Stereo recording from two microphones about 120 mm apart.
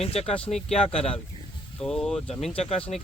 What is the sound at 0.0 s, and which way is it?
Speech, 55° left (ahead or behind).